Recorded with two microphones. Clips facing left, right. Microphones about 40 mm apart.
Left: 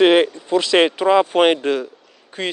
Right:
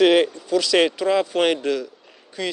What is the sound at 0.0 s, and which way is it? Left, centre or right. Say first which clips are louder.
Speech: left 2 dB; left.